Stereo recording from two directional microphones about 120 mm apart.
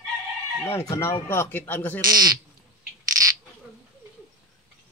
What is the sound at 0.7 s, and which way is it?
Speech, 25° left (ahead or behind).